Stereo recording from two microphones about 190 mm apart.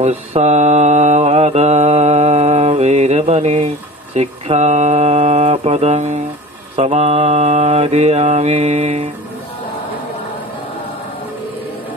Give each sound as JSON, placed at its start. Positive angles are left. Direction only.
{"t": 0.0, "sound": "mantra", "side_deg": -35}